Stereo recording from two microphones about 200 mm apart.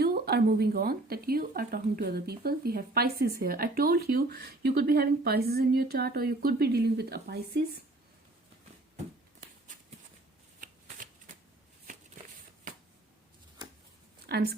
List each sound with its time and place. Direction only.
0.0 s speech: 50° right (ahead or behind)
10.6 s shuffling cards: 40° right (ahead or behind)
14.3 s a woman's voice: 55° right (ahead or behind)